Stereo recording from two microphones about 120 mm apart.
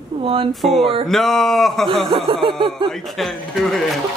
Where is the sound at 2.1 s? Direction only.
40° right (ahead or behind).